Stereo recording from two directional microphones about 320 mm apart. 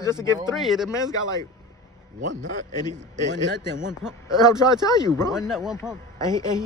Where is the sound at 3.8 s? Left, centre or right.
Centre.